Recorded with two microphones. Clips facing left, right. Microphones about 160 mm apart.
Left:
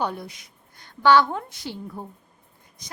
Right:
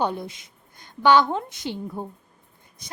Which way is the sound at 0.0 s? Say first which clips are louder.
Right 3 dB; 25° right (ahead or behind).